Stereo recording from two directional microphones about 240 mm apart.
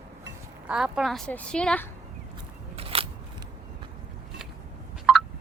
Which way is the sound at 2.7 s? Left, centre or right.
Right.